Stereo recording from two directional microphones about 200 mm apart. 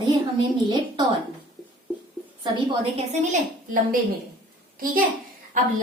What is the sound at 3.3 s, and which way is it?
Speech, 40° right (ahead or behind).